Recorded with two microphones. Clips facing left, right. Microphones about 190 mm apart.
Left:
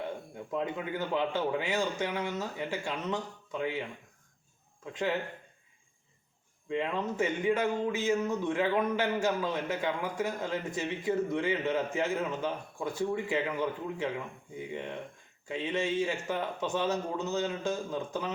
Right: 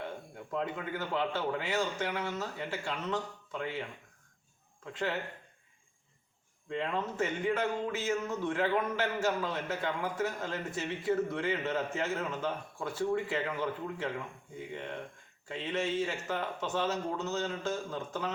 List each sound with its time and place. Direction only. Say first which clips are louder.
0.5 s a man's voice: left 2 dB; 15° left (ahead or behind)
6.7 s a man's voice: left 2 dB; 15° left (ahead or behind)